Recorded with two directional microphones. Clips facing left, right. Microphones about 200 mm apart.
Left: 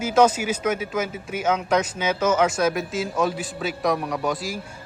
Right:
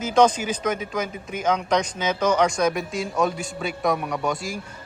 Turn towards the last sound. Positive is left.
turn(degrees=0)  # may be behind; listen again after turning